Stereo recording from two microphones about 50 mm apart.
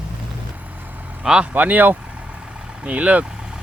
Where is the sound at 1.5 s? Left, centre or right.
Right.